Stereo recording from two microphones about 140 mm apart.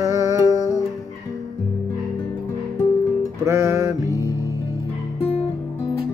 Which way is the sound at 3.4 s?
20° right (ahead or behind).